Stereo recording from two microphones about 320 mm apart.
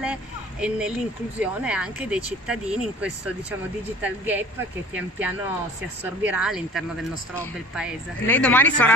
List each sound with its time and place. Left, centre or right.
0.0 s a sound: centre
1.4 s speech: centre
6.0 s speech: centre